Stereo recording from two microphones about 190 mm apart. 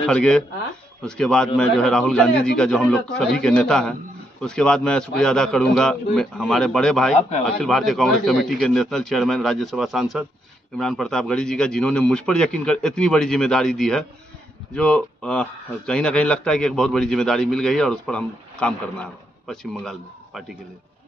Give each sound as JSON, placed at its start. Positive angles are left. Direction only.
{"t": 0.0, "sound": "a man's voice", "side_deg": 5}
{"t": 7.2, "sound": "speech", "side_deg": 35}
{"t": 7.6, "sound": "a man's voice", "side_deg": 0}